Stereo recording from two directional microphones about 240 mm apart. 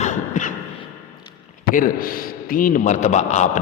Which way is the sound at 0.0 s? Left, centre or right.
Left.